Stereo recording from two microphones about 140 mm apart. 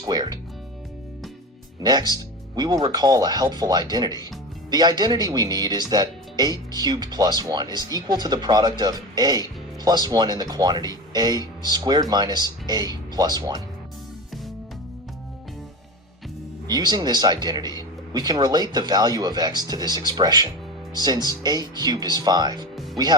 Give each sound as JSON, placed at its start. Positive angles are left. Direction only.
{"t": 0.1, "sound": "music", "side_deg": -30}
{"t": 1.8, "sound": "speech", "side_deg": -30}
{"t": 16.6, "sound": "speech", "side_deg": -30}